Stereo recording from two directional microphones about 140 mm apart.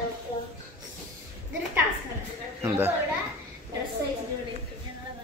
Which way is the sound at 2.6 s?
15° right (ahead or behind).